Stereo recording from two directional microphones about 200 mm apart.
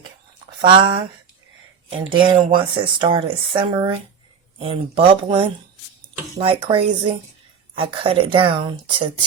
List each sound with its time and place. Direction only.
0.6 s speech: 25° right (ahead or behind)
8.0 s speech: 25° right (ahead or behind)